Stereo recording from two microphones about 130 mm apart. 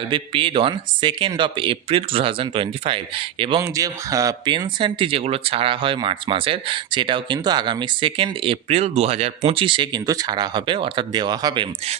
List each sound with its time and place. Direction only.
0.1 s speech: 45° right (ahead or behind)
3.6 s speech: 25° right (ahead or behind); by 9.3 s 50° right (ahead or behind)
9.5 s speech: 40° right (ahead or behind)